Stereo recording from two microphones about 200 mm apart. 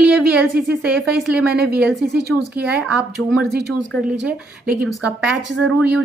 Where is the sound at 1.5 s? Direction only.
55° right (ahead or behind).